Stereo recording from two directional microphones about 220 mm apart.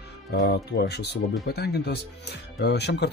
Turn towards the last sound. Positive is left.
turn(degrees=50)  # may be behind; listen again after turning